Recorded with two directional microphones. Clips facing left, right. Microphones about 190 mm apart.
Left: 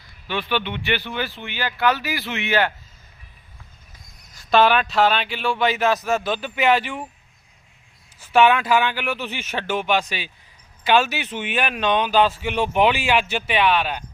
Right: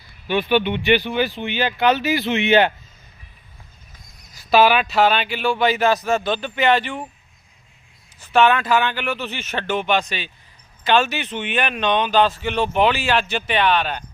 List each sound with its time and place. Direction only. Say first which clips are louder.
0.3 s speech: right 6 dB; 15° right (ahead or behind)
4.4 s speech: right 2 dB; 5° right (ahead or behind)
8.2 s a man's voice: even; 10° left (ahead or behind)